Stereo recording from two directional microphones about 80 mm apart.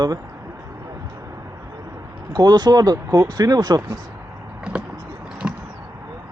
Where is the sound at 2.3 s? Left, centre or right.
Right.